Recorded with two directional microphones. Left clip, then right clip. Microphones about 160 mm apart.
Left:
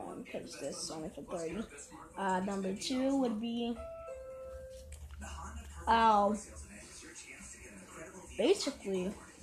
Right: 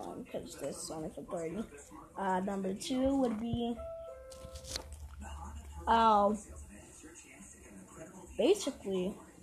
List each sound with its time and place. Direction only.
0.3 s speech: 5° right (ahead or behind)
5.9 s speech: 20° right (ahead or behind)
8.4 s speech: 10° right (ahead or behind)